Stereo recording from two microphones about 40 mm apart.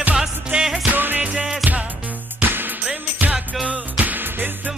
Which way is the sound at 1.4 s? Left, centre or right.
Centre.